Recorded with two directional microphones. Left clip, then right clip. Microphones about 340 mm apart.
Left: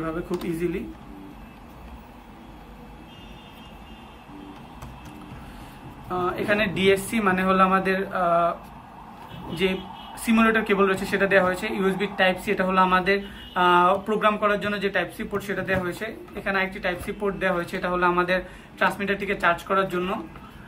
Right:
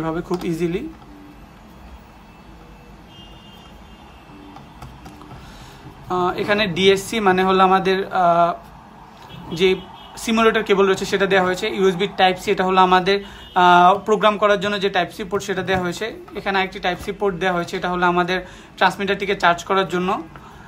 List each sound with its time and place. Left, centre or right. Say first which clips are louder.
0.0 s speech: right 5 dB; centre
6.0 s speech: right 5 dB; centre
10.2 s speech: right 4 dB; centre